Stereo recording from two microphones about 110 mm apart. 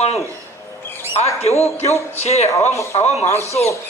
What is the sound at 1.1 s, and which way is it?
Speech, 70° left (ahead or behind).